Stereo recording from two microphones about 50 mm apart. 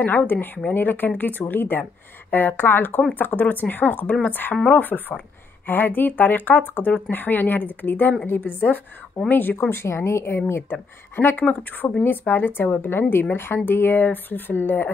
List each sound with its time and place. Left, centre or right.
0.0 s speech: left
10.5 s speech: left